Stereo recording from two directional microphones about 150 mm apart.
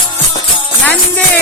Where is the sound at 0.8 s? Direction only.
10° left (ahead or behind).